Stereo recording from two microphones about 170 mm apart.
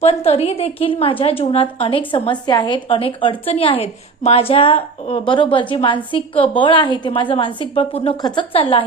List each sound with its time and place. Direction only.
0.0 s a woman's voice: 40° left (ahead or behind)